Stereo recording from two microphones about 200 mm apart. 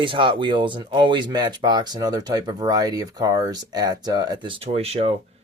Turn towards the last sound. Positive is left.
turn(degrees=-30)  # may be behind; listen again after turning